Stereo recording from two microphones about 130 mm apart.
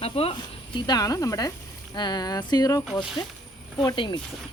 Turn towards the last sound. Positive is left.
turn(degrees=40)  # may be behind; listen again after turning